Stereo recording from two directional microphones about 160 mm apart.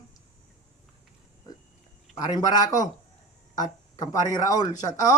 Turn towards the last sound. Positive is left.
turn(degrees=20)  # may be behind; listen again after turning